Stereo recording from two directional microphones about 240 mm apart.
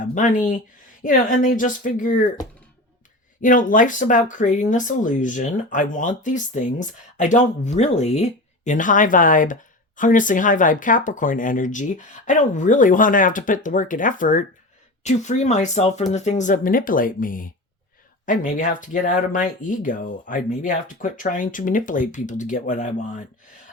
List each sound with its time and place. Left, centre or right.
0.0 s speech: left
3.4 s speech: left